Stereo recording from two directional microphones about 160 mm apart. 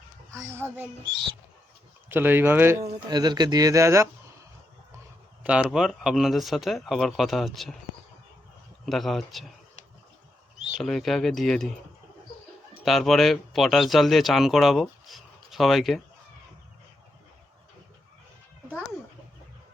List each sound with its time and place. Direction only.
0.3 s speech: 15° right (ahead or behind)
2.0 s speech: 15° right (ahead or behind)
3.1 s speech: 25° right (ahead or behind)
5.4 s speech: 5° right (ahead or behind)
8.9 s speech: centre (ahead or behind)
10.8 s speech: centre (ahead or behind)
12.8 s speech: centre (ahead or behind)